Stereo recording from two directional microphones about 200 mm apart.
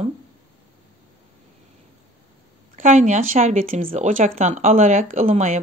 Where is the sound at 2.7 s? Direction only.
40° right (ahead or behind).